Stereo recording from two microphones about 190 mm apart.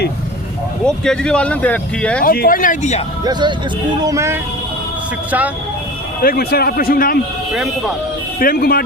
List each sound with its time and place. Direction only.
0.9 s speech: 5° left (ahead or behind)
2.2 s a man's voice: 50° left (ahead or behind)
4.0 s speech: 15° right (ahead or behind)
6.2 s a man's voice: 55° left (ahead or behind)
8.4 s a man's voice: 50° left (ahead or behind)